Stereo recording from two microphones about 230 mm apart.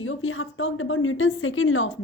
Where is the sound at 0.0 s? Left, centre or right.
Left.